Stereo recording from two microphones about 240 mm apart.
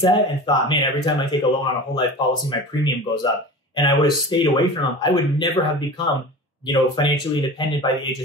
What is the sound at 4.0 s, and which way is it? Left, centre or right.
A man's voice, centre.